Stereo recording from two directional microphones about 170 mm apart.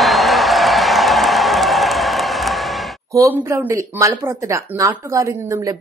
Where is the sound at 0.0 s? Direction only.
Centre (ahead or behind).